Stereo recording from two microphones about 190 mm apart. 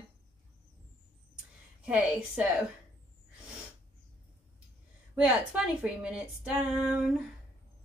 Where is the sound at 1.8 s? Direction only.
5° right (ahead or behind).